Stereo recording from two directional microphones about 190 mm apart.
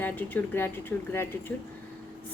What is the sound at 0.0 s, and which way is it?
A woman's voice, 10° left (ahead or behind).